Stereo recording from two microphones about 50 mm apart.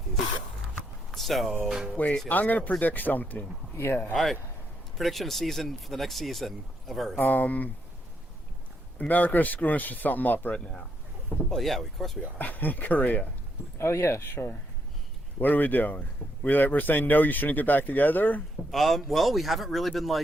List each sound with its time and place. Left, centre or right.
1.1 s vehicle: centre
2.0 s speech: left
3.8 s speech: left
4.1 s speech: centre
7.2 s speech: left
9.0 s speech: left
10.5 s speech: centre
11.4 s speech: centre
12.4 s speech: left
13.7 s speech: left
15.4 s speech: left
18.7 s speech: centre